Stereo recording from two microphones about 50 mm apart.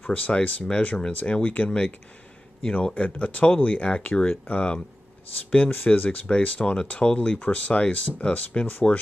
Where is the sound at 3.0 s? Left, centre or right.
Left.